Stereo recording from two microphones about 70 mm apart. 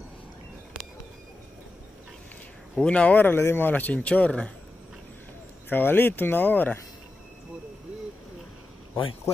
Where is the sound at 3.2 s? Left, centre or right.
Left; by 4.5 s centre.